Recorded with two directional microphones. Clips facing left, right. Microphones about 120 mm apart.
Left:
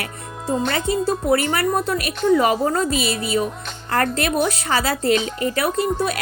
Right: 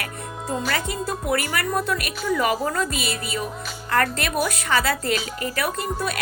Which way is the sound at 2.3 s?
45° left (ahead or behind).